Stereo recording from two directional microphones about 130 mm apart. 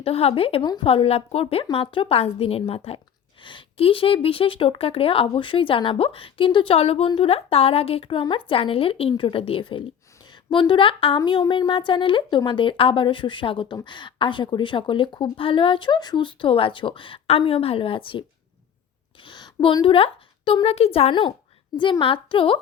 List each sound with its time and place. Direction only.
0.0 s a woman's voice: 50° left (ahead or behind)